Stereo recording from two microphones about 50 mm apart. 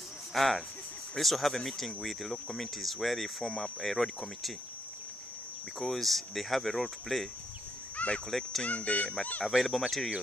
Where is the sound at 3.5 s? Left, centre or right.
Centre.